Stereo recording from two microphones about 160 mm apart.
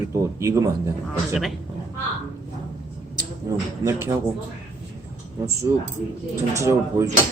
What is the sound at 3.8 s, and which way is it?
Speech, 15° right (ahead or behind).